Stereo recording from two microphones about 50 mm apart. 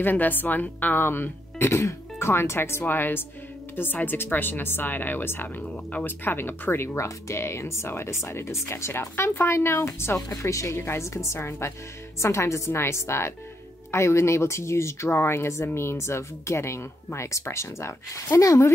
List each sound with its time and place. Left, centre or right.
0.0 s speech: left
1.7 s speech: left
2.8 s speech: left
5.6 s speech: left
6.0 s speech: left
7.2 s speech: left
10.3 s speech: left
12.2 s speech: left